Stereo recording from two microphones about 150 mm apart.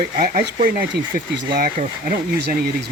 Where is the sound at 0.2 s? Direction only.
80° right.